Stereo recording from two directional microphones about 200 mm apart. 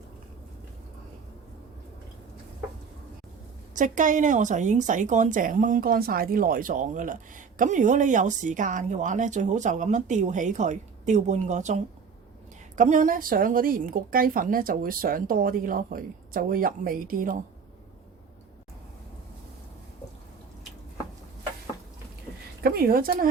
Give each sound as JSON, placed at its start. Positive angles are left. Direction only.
{"t": 3.8, "sound": "a woman's voice", "side_deg": -40}
{"t": 22.6, "sound": "a woman's voice", "side_deg": -50}